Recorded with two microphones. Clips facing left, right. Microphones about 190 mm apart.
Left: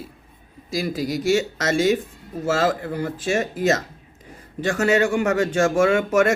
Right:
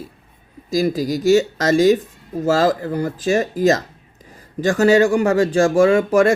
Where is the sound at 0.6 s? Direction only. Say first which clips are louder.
Right 6 dB; 40° right (ahead or behind).